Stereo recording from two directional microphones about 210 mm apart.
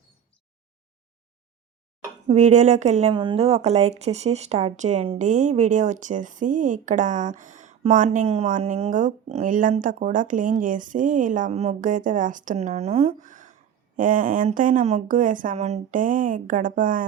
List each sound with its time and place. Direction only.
2.2 s speech: 35° right (ahead or behind)